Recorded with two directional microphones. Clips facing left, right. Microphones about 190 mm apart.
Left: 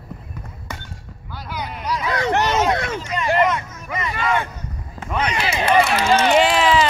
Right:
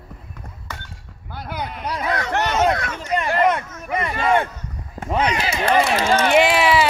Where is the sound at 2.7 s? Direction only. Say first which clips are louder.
Left 2 dB; 30° left (ahead or behind).